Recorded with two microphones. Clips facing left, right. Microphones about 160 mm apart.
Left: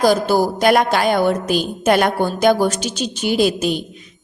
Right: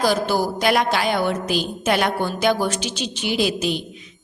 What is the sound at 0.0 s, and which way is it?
A woman's voice, 45° left (ahead or behind).